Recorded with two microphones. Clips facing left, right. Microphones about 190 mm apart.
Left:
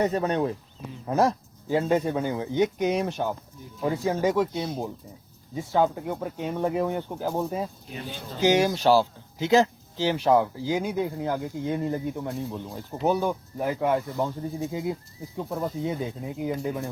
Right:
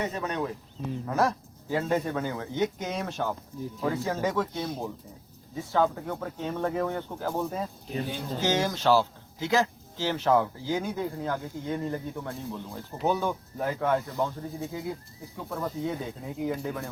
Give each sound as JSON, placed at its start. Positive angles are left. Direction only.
{"t": 0.0, "sound": "speech", "side_deg": 35}
{"t": 1.0, "sound": "speech", "side_deg": 20}